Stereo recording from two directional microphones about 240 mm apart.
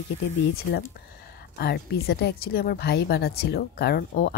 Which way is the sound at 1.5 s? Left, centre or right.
Left.